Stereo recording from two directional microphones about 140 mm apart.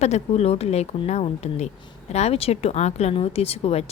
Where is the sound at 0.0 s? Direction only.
50° left (ahead or behind).